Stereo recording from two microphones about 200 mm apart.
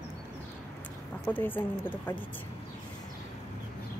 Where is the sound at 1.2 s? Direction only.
10° left (ahead or behind).